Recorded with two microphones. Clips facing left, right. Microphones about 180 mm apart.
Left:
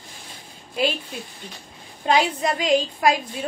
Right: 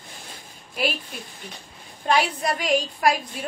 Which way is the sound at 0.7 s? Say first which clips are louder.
Left 3 dB; 25° left (ahead or behind).